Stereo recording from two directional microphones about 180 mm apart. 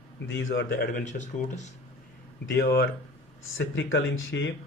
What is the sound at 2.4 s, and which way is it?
Speech, 90° left.